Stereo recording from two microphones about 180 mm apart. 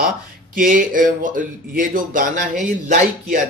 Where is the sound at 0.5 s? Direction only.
50° right (ahead or behind).